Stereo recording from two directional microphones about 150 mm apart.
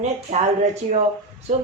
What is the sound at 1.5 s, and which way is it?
Speech, 55° right (ahead or behind).